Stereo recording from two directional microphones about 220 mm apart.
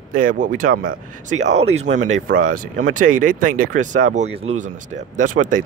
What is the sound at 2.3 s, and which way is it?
Speech, 40° right (ahead or behind).